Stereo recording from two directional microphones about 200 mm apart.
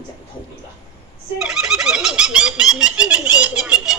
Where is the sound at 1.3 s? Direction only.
5° right (ahead or behind).